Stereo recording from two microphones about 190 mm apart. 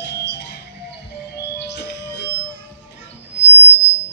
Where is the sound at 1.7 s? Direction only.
65° left (ahead or behind).